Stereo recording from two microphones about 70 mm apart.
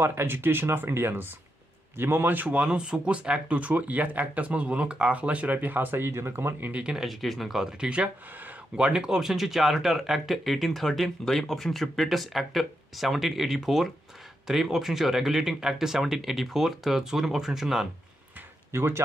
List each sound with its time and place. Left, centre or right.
0.0 s speech: right
6.6 s speech: centre
7.1 s speech: centre
18.7 s speech: right